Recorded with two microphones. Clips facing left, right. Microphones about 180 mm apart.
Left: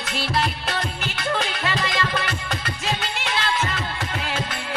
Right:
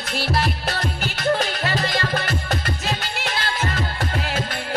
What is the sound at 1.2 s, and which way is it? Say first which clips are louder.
Music: right 4 dB; 45° right (ahead or behind).